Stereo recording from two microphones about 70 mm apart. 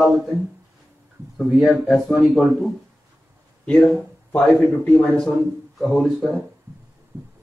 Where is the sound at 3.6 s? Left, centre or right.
Centre.